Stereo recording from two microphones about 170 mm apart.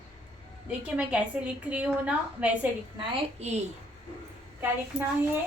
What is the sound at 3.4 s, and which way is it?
Speech, 40° right (ahead or behind).